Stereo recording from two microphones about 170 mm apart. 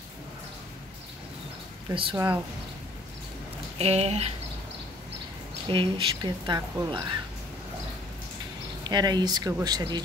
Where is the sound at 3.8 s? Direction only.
40° right (ahead or behind).